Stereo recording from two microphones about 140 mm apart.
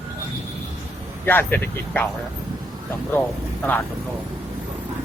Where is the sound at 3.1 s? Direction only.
10° left (ahead or behind).